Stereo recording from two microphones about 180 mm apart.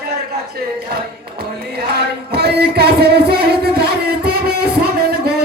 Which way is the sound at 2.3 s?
65° right (ahead or behind).